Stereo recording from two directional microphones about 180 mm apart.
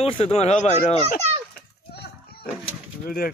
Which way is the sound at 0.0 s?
35° left (ahead or behind).